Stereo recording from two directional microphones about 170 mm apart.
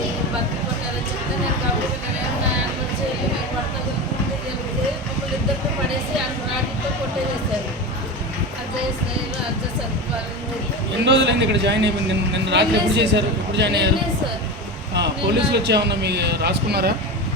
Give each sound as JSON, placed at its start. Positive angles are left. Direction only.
{"t": 11.0, "sound": "a man's voice", "side_deg": -90}
{"t": 14.9, "sound": "speech", "side_deg": -85}